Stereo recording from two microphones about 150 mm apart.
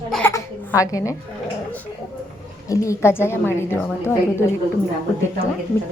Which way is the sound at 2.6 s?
20° left (ahead or behind).